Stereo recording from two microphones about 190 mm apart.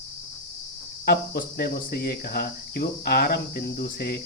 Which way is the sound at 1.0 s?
55° left (ahead or behind).